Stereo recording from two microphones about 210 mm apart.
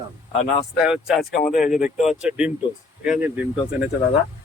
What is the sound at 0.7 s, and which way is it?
Speech, centre (ahead or behind).